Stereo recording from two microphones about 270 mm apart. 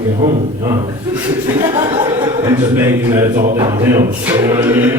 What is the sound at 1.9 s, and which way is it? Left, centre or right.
A man's voice, centre.